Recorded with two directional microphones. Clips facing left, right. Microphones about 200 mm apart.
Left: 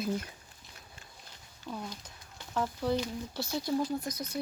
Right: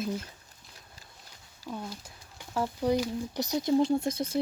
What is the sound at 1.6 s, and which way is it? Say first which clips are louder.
Speech: right 2 dB; 5° right (ahead or behind).